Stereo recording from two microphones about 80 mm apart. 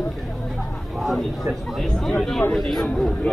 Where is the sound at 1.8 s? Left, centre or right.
Centre.